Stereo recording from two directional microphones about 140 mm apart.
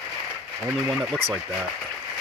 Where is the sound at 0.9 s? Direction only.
Centre (ahead or behind).